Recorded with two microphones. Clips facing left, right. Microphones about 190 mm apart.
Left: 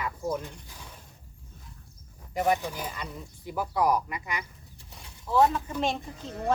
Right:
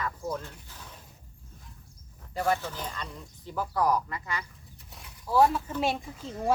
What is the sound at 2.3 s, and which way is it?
Speech, 15° left (ahead or behind).